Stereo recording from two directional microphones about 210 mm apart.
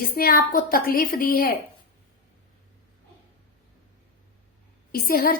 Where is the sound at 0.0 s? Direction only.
45° left (ahead or behind).